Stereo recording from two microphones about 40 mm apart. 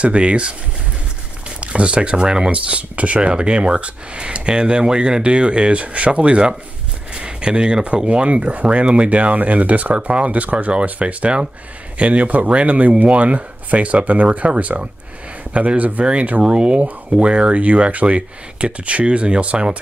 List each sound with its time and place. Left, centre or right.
0.0 s speech: right
1.6 s speech: right
7.1 s a sound: right
7.8 s speech: right